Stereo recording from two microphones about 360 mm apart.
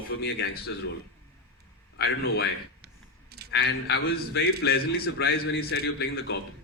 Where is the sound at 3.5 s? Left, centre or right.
Left.